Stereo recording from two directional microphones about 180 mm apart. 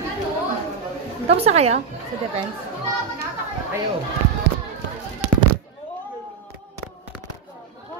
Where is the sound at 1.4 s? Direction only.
35° right (ahead or behind).